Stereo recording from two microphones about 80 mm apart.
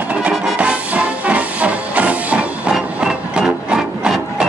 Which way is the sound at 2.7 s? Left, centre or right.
Centre.